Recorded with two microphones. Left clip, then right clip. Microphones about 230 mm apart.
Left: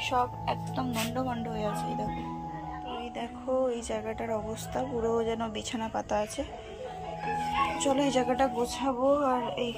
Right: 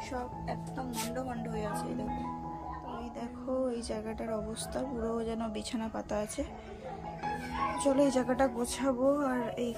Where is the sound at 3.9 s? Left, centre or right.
Centre.